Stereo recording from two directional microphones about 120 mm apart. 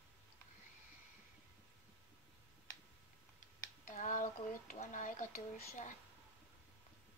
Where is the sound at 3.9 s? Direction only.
90° left.